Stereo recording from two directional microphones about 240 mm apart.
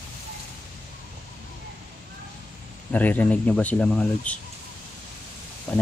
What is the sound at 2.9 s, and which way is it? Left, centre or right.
Speech, centre.